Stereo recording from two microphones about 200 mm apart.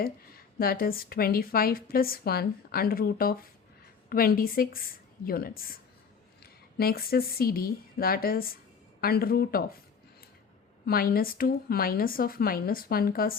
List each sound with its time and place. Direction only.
0.0 s a woman's voice: 45° left (ahead or behind)
10.8 s a woman's voice: 50° left (ahead or behind)